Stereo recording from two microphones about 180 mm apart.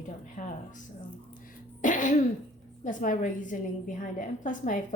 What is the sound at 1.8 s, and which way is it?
Throat clearing, 45° left (ahead or behind).